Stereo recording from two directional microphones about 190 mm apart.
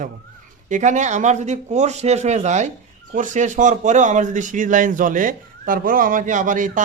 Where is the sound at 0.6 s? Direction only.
40° right (ahead or behind).